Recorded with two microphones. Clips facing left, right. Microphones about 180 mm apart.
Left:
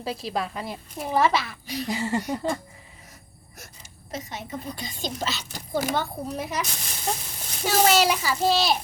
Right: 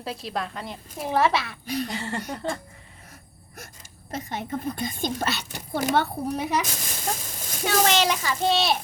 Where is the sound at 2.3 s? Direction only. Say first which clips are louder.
Left 3 dB; 5° left (ahead or behind).